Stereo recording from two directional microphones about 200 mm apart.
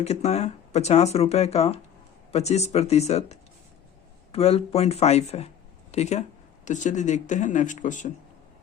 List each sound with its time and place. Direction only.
0.0 s speech: 35° left (ahead or behind)